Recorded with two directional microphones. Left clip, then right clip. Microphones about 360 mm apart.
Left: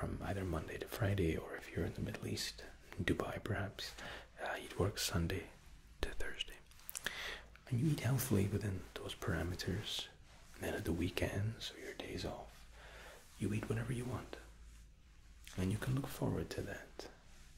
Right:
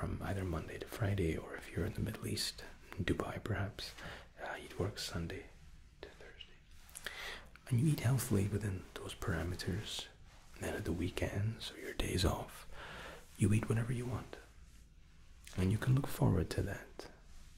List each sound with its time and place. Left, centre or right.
0.0 s speech: centre
6.0 s whispering: left
6.9 s speech: centre
12.0 s whispering: right
13.4 s speech: right
13.8 s speech: centre
15.5 s speech: centre